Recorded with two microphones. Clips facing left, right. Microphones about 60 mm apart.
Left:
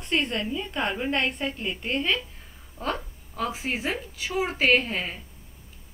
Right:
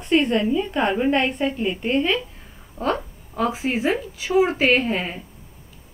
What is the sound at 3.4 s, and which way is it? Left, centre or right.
A woman's voice, centre.